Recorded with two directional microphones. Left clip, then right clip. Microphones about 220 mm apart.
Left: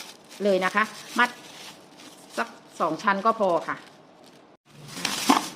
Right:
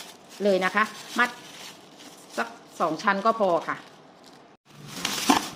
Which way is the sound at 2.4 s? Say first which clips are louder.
Even; centre (ahead or behind).